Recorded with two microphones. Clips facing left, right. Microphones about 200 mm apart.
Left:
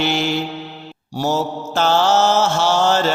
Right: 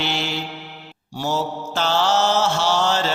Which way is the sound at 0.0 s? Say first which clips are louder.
Left 6 dB; 50° left (ahead or behind).